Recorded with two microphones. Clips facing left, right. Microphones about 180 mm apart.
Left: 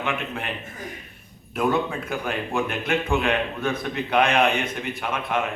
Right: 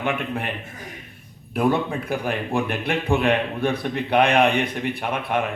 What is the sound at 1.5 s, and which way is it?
A man's voice, 35° right (ahead or behind).